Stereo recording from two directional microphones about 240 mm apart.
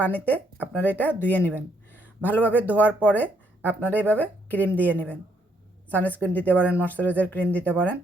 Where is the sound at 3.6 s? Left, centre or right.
Centre.